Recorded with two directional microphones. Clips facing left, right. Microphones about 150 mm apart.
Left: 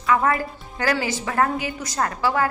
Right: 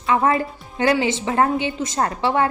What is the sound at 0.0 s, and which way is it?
A woman's voice, 25° right (ahead or behind).